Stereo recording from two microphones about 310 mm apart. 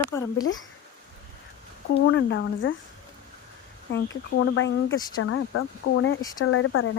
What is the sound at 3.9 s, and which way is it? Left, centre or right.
Speech, left.